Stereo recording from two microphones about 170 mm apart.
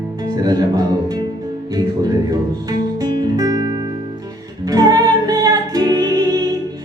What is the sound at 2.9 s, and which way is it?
Music, 20° right (ahead or behind).